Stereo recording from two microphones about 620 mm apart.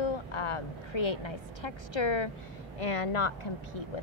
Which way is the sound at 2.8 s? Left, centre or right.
Left.